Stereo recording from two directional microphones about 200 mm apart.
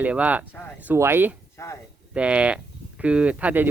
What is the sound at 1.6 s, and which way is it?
Speech, 15° left (ahead or behind).